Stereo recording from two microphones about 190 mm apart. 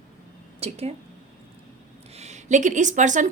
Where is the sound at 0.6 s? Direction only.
35° right (ahead or behind).